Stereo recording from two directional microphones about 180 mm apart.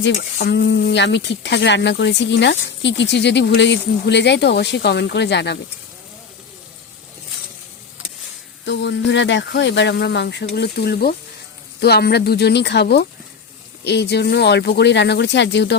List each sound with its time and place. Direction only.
0.0 s speech: 70° left (ahead or behind)
8.6 s speech: 75° left (ahead or behind)